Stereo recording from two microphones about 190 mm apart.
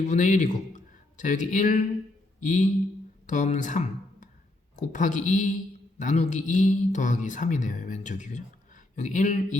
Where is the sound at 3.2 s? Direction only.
40° left (ahead or behind).